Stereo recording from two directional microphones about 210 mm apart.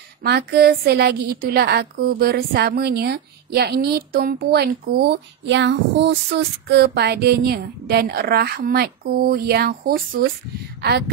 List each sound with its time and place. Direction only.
0.2 s a woman's voice: 50° right (ahead or behind)